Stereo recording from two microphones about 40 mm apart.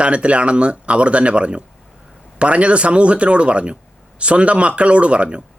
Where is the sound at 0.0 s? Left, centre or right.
Right.